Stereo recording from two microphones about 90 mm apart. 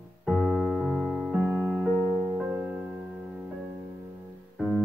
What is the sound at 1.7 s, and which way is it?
Music, 10° left (ahead or behind).